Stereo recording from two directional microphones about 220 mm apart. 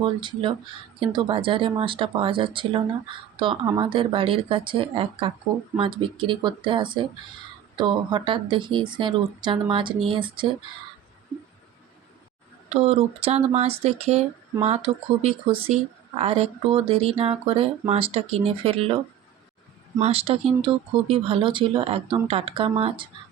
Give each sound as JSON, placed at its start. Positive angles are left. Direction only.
{"t": 0.0, "sound": "speech", "side_deg": -20}
{"t": 12.6, "sound": "speech", "side_deg": -30}
{"t": 20.0, "sound": "speech", "side_deg": -25}